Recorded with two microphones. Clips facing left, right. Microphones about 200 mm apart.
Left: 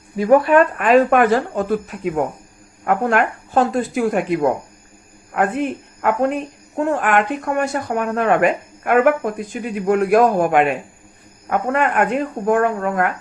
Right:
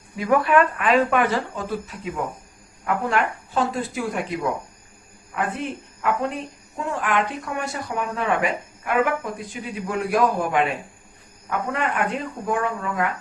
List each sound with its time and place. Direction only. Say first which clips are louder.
0.2 s speech: left 6 dB; 40° left (ahead or behind)